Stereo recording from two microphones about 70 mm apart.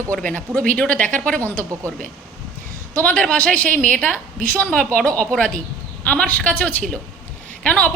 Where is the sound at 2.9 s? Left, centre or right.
Left.